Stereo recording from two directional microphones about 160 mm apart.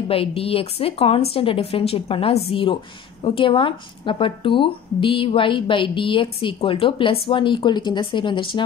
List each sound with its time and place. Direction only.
0.1 s speech: 35° left (ahead or behind)